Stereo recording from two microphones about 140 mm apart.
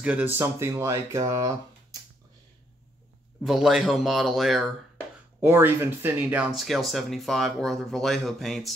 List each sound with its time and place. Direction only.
0.0 s speech: 10° right (ahead or behind)
3.4 s speech: centre (ahead or behind)
5.4 s speech: 15° right (ahead or behind)
6.5 s speech: centre (ahead or behind)